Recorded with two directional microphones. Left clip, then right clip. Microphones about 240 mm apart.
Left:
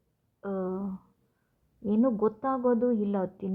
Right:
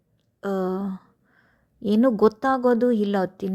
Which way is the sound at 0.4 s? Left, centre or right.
Right.